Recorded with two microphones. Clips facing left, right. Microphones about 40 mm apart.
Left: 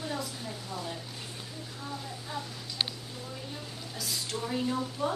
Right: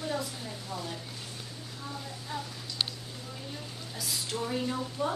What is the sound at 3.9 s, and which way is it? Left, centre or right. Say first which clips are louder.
A woman's voice: right 1 dB; centre.